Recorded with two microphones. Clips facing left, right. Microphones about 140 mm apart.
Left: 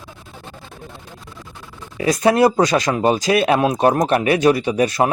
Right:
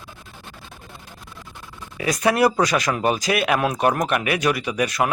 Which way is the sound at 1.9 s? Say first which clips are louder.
Left 5 dB; 30° left (ahead or behind).